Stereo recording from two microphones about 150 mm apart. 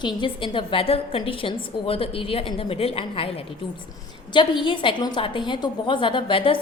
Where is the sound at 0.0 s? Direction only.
30° left (ahead or behind).